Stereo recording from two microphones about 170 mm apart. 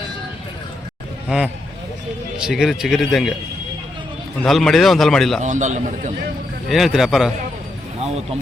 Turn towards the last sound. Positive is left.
turn(degrees=0)  # may be behind; listen again after turning